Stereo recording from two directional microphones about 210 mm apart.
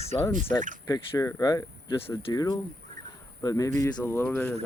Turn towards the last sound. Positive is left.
turn(degrees=5)  # may be behind; listen again after turning